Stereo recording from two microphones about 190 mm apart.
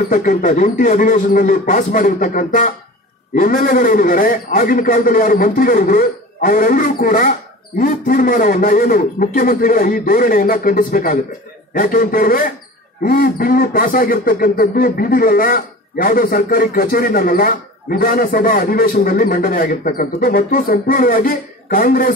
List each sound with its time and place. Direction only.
0.1 s speech: 45° left (ahead or behind)